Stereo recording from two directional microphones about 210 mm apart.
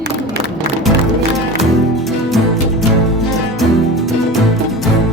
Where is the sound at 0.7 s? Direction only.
50° right (ahead or behind).